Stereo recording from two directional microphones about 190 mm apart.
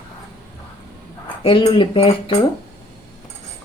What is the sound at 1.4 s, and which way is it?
Speech, 30° left (ahead or behind).